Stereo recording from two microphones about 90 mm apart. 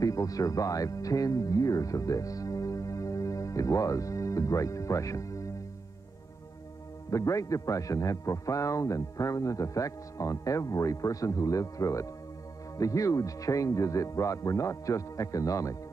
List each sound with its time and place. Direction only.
0.0 s speech: 40° left (ahead or behind)
7.1 s a man's voice: 35° left (ahead or behind)